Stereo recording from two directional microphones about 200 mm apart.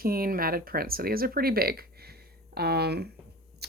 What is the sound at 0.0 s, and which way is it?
Speech, 45° right (ahead or behind).